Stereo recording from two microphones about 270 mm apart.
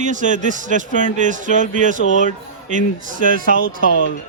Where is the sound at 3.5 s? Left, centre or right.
Left.